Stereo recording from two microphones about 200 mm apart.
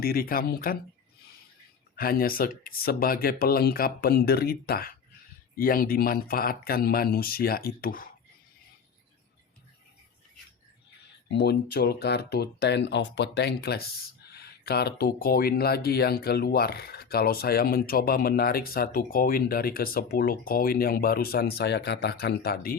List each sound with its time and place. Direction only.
0.0 s speech: 50° left (ahead or behind)
2.0 s speech: 50° left (ahead or behind)
11.3 s speech: 55° left (ahead or behind)